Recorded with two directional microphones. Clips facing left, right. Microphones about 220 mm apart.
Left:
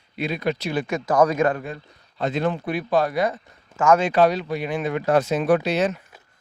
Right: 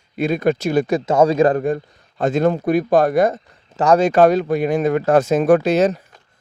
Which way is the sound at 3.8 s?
35° right (ahead or behind).